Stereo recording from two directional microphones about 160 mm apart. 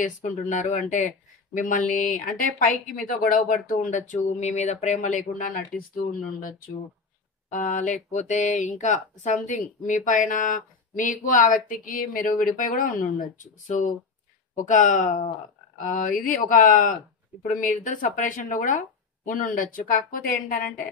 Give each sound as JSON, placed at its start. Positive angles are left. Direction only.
{"t": 0.0, "sound": "speech", "side_deg": 50}
{"t": 7.5, "sound": "speech", "side_deg": 50}